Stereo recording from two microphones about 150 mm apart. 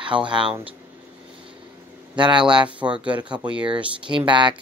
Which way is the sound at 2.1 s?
30° right (ahead or behind).